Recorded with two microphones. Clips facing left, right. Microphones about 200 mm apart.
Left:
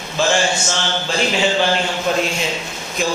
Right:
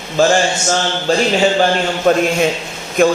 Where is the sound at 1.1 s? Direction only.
40° right (ahead or behind).